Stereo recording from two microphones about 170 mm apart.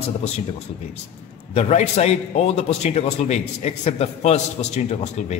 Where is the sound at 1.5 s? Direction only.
40° left (ahead or behind).